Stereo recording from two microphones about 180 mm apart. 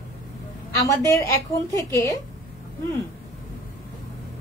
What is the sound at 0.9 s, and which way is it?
A woman's voice, 15° left (ahead or behind).